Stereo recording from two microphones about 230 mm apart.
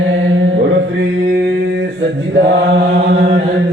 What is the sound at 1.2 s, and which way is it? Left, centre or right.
Mantra, right.